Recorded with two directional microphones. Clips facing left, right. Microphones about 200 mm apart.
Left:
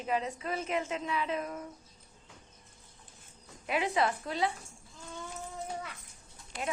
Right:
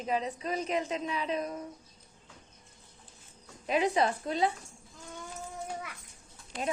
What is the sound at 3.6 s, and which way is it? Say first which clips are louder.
Speech: right 3 dB; 20° right (ahead or behind).